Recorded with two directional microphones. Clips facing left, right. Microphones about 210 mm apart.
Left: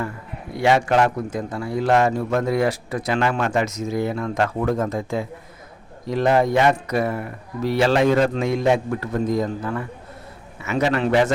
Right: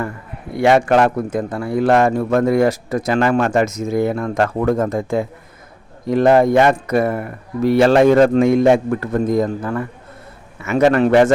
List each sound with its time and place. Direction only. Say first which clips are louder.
0.5 s a man's voice: right 5 dB; 55° right (ahead or behind)